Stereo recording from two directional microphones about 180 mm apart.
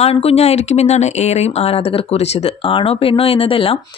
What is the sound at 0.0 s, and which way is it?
A woman's voice, 35° left (ahead or behind).